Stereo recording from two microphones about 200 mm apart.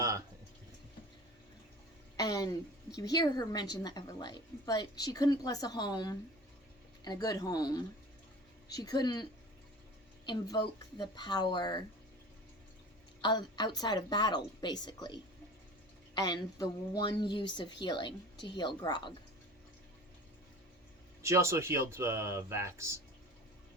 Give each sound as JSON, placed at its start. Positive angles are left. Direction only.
{"t": 2.1, "sound": "a woman's voice", "side_deg": 20}
{"t": 10.2, "sound": "a woman's voice", "side_deg": 20}
{"t": 13.2, "sound": "a woman's voice", "side_deg": 20}
{"t": 21.2, "sound": "speech", "side_deg": -15}